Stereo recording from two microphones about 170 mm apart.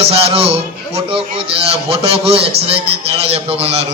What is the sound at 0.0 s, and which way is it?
A man's voice, 35° right (ahead or behind).